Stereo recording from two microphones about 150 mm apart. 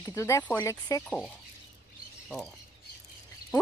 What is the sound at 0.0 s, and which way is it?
Speech, 20° left (ahead or behind).